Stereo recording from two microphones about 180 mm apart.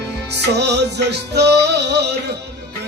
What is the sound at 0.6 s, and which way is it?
Music, 70° right (ahead or behind).